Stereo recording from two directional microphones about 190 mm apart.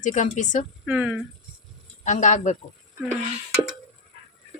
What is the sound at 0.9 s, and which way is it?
Speech, 5° right (ahead or behind).